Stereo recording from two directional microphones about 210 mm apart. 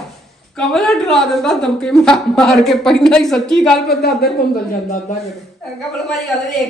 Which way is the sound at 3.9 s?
50° left (ahead or behind).